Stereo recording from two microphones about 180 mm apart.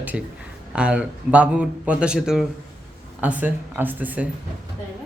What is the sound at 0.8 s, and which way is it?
A man's voice, 5° right (ahead or behind).